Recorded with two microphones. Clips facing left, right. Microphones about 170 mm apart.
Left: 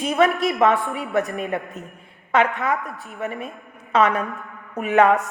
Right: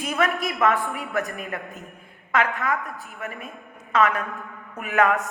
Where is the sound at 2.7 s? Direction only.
Centre (ahead or behind).